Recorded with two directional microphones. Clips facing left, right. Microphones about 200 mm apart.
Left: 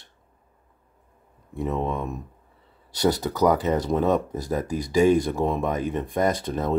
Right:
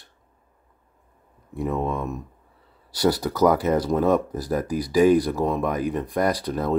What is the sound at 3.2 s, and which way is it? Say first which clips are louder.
Speech: right 2 dB; 15° left (ahead or behind).